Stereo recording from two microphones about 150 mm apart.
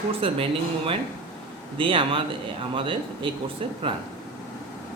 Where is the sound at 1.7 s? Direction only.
35° right (ahead or behind).